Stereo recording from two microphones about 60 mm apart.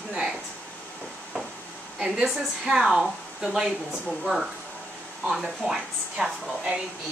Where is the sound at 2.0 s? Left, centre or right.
Centre.